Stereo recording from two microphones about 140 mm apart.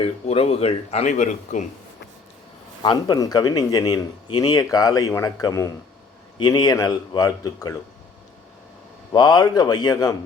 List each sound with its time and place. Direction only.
0.0 s speech: 45° left (ahead or behind); by 1.6 s 60° left (ahead or behind)
2.8 s speech: 30° left (ahead or behind)
9.1 s speech: 30° left (ahead or behind)